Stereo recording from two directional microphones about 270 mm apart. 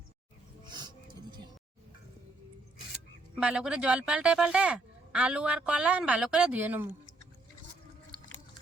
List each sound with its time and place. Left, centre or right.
0.6 s music: centre
3.4 s speech: centre